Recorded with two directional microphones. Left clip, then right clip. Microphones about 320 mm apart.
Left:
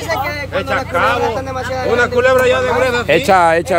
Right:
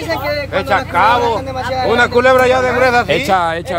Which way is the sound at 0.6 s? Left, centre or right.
Centre.